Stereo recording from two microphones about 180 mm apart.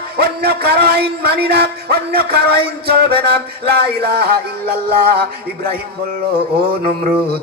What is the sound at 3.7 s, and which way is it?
Speech, 65° right (ahead or behind).